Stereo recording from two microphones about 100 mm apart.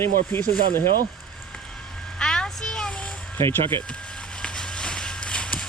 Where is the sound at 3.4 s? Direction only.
55° right (ahead or behind).